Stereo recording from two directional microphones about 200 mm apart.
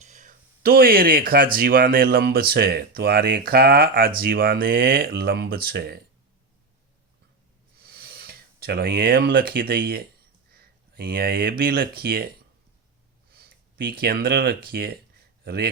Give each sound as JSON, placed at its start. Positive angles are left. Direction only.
{"t": 0.0, "sound": "a sound", "side_deg": -40}
{"t": 1.5, "sound": "speech", "side_deg": -45}
{"t": 7.8, "sound": "speech", "side_deg": -50}
{"t": 13.3, "sound": "speech", "side_deg": -50}